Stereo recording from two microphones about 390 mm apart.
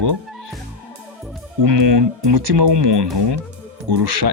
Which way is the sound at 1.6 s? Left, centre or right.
Right.